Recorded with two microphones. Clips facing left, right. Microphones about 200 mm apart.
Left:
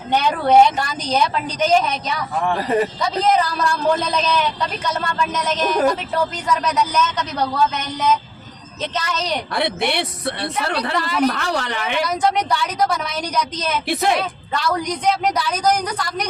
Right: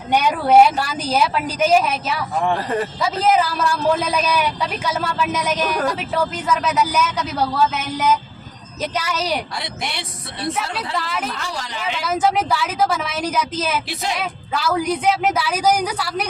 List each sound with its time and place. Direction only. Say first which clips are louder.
0.1 s a man's voice: even; 10° right (ahead or behind)
2.6 s speech: left 3 dB; 15° left (ahead or behind)
3.0 s a man's voice: even; 5° right (ahead or behind)
9.6 s a woman's voice: left 8 dB; 60° left (ahead or behind)
10.9 s a woman's voice: left 6 dB; centre (ahead or behind)
11.3 s a woman's voice: left 7 dB; 65° left (ahead or behind)
12.0 s a woman's voice: right 3 dB; 5° right (ahead or behind)
13.8 s a woman's voice: left 7 dB; 55° left (ahead or behind)
14.2 s a woman's voice: left 1 dB; 5° right (ahead or behind)